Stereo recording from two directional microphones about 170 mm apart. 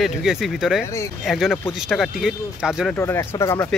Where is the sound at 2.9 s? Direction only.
15° left (ahead or behind).